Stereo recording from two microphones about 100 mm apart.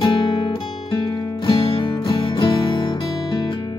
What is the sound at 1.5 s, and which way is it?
Music, 60° left (ahead or behind).